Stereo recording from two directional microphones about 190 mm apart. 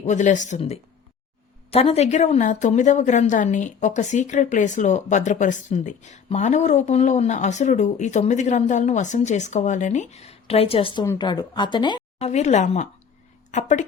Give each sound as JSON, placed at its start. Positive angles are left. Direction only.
{"t": 0.0, "sound": "a woman's voice", "side_deg": 40}
{"t": 12.3, "sound": "a woman's voice", "side_deg": 35}